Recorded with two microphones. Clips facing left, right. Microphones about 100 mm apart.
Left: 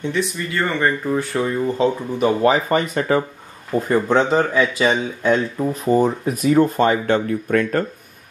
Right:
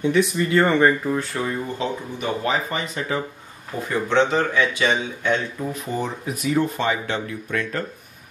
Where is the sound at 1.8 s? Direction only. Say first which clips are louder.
Left 8 dB; 45° left (ahead or behind).